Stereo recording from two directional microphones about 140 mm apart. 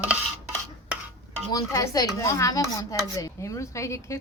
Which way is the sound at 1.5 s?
25° left (ahead or behind).